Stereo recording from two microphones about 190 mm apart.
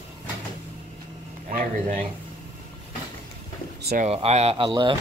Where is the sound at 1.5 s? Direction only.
40° right (ahead or behind).